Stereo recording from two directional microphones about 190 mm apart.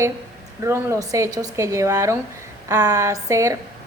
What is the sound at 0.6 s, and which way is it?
A woman's voice, 15° right (ahead or behind).